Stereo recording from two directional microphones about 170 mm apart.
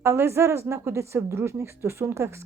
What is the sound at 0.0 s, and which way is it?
A woman's voice, 15° right (ahead or behind).